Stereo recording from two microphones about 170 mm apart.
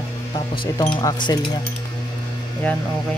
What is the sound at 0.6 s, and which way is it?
Speech, 25° left (ahead or behind).